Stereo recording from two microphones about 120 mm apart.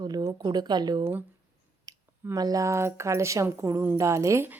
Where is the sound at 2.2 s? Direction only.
30° right (ahead or behind).